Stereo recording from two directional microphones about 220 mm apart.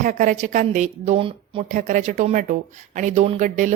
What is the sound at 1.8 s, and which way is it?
Speech, 35° right (ahead or behind).